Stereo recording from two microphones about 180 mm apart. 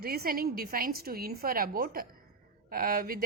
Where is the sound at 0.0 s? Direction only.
55° right (ahead or behind).